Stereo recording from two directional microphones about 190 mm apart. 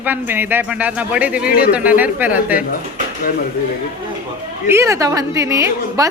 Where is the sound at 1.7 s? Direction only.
10° right (ahead or behind).